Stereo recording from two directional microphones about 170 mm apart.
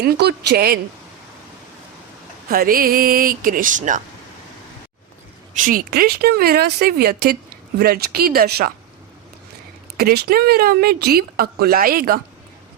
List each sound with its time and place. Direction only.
0.0 s speech: 75° right (ahead or behind)
2.5 s speech: 60° right (ahead or behind)
5.5 s speech: 55° right (ahead or behind)
10.0 s speech: 65° right (ahead or behind)